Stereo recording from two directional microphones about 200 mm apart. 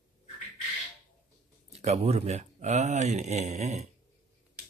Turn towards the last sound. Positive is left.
turn(degrees=-35)  # may be behind; listen again after turning